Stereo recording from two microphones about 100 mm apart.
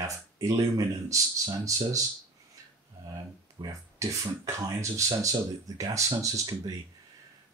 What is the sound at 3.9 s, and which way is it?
Speech, 30° right (ahead or behind).